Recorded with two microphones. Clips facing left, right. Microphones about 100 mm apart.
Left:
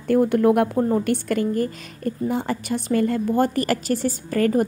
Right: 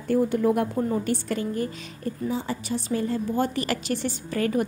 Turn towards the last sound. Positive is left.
turn(degrees=45)  # may be behind; listen again after turning